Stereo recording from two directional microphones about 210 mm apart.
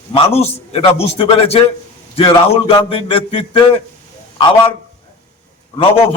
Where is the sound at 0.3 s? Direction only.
30° left (ahead or behind).